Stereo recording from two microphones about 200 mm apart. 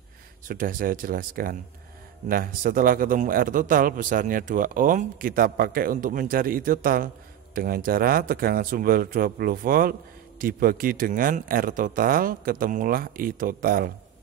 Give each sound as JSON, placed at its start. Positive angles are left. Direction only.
{"t": 0.5, "sound": "a man's voice", "side_deg": -45}